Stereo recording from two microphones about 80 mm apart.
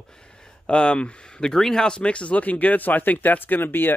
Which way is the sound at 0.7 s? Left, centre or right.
Centre.